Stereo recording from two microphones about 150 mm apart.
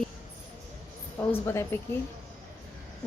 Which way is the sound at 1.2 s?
15° left (ahead or behind).